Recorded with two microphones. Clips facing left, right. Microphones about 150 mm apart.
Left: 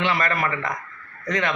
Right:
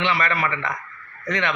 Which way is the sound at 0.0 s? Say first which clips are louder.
Even; 45° left (ahead or behind).